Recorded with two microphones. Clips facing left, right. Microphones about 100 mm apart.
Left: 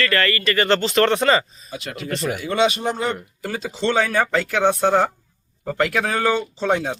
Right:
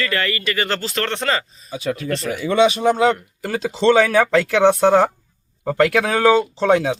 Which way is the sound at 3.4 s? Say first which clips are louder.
Right 7 dB; 85° right.